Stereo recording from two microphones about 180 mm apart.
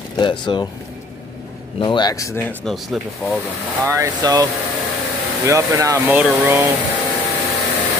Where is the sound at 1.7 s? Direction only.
25° left (ahead or behind).